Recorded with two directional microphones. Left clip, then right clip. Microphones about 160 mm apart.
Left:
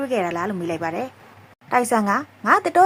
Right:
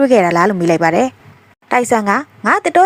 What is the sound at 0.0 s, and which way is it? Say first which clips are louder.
A woman's voice: right 12 dB; 40° right (ahead or behind).